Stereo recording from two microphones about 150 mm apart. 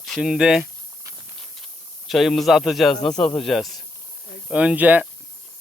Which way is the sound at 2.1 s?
Centre (ahead or behind).